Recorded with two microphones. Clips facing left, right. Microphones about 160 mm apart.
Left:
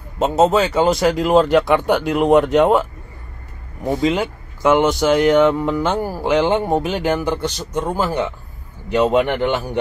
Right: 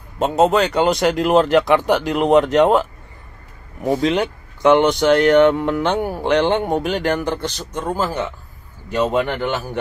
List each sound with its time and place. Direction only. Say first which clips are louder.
0.5 s a man's voice: left 1 dB; centre (ahead or behind)